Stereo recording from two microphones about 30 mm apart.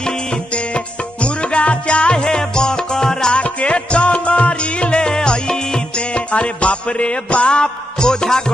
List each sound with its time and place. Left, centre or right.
0.5 s music: left
3.3 s music: left
6.1 s music: left